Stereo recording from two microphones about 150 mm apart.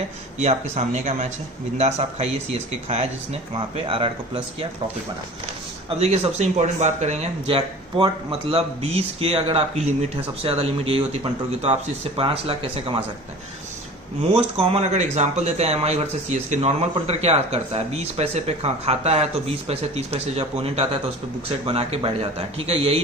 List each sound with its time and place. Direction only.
0.3 s speech: 50° right (ahead or behind)
6.0 s speech: 45° right (ahead or behind)
14.3 s speech: 40° right (ahead or behind)